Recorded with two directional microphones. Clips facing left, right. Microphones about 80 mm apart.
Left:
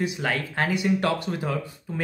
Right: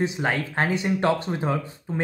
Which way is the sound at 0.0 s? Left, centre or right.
Right.